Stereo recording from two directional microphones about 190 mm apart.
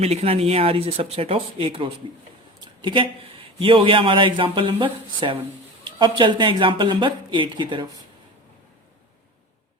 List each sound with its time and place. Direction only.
0.0 s a man's voice: 35° right (ahead or behind)